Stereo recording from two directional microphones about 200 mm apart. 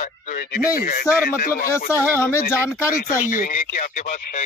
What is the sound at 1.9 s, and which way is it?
Speech, 15° left (ahead or behind).